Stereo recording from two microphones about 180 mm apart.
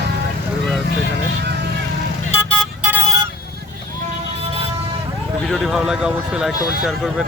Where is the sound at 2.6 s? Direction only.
10° right (ahead or behind).